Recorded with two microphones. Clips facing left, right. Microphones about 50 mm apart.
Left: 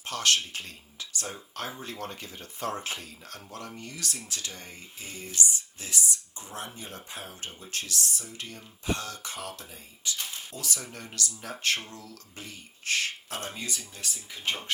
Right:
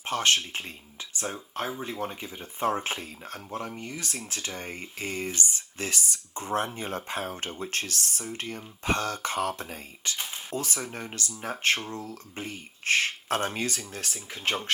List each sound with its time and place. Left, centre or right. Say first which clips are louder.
0.0 s speech: right 2 dB; right
10.2 s speech: right 5 dB; right
13.4 s speech: right 7 dB; right